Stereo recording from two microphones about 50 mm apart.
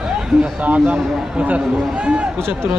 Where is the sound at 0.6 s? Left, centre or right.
Right.